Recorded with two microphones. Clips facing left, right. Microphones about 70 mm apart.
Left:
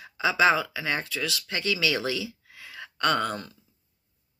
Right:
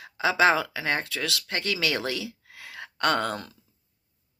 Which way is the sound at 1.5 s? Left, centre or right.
Right.